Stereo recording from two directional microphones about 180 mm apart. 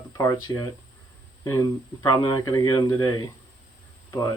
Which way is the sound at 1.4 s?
20° left (ahead or behind).